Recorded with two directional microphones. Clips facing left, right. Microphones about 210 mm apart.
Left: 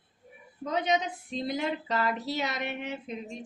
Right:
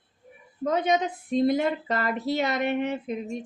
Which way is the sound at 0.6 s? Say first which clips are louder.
Right 4 dB; 50° right (ahead or behind).